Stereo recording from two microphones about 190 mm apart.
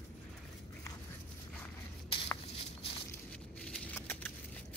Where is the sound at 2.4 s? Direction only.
35° left (ahead or behind).